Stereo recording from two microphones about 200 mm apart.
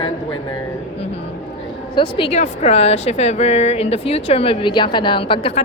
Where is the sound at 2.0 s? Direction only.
25° left (ahead or behind).